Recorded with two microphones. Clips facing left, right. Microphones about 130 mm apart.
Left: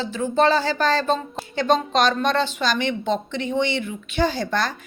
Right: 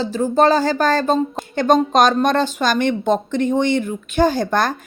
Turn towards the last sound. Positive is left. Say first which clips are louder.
# right 6 dB
turn(degrees=-50)  # may be behind; listen again after turning